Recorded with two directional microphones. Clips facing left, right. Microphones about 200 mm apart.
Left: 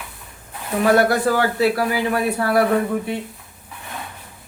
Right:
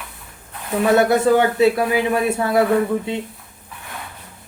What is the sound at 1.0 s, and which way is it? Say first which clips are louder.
Speech: right 3 dB; 20° right (ahead or behind).